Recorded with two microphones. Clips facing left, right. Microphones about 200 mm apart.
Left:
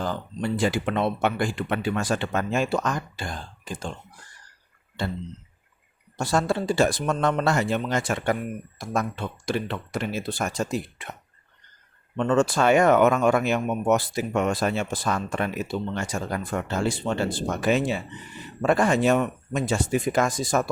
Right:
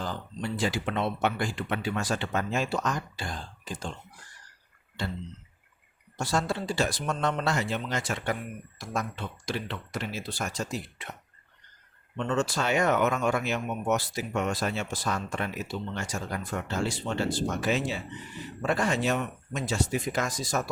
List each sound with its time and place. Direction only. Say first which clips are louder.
0.0 s speech: left 6 dB; 55° left (ahead or behind)
6.1 s speech: left 5 dB; 50° left (ahead or behind)
12.1 s speech: left 7 dB; 55° left (ahead or behind)